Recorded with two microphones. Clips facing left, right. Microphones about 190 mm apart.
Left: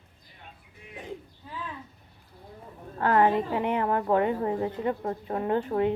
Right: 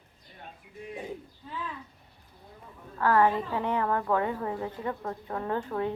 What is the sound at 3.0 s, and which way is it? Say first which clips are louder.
A woman's voice: left 1 dB; 20° left (ahead or behind).